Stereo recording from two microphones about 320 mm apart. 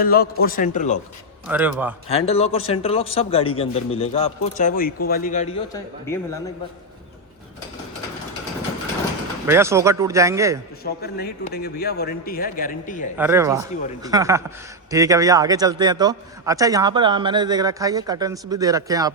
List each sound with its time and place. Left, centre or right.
0.0 s a man's voice: left
1.5 s a man's voice: centre
2.0 s a man's voice: centre
9.5 s a man's voice: centre
10.8 s a man's voice: left
13.1 s a man's voice: centre